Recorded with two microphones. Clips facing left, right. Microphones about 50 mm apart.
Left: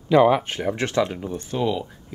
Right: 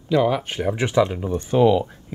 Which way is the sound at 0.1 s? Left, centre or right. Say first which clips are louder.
Left 3 dB; centre.